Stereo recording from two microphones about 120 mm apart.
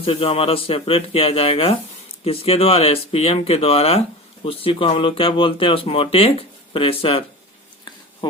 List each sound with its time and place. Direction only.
0.0 s speech: 50° left (ahead or behind)
8.2 s speech: 35° left (ahead or behind)